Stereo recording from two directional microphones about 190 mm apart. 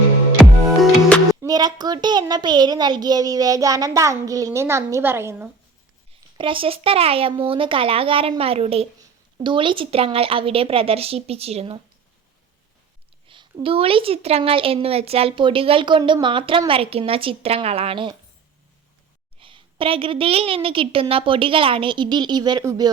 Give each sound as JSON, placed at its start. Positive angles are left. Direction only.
{"t": 0.3, "sound": "music", "side_deg": 5}
{"t": 1.3, "sound": "a woman's voice", "side_deg": -20}
{"t": 6.3, "sound": "a woman's voice", "side_deg": -25}
{"t": 13.2, "sound": "a woman's voice", "side_deg": -25}
{"t": 19.4, "sound": "a woman's voice", "side_deg": -25}